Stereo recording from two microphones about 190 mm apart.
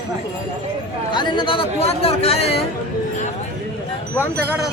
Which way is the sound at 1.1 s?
25° left (ahead or behind).